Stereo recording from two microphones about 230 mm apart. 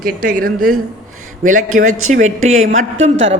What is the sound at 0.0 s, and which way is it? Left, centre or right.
Speech, right.